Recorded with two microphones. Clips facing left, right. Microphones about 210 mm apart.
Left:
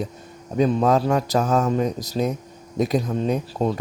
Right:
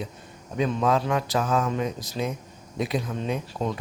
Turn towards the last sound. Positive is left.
turn(degrees=40)  # may be behind; listen again after turning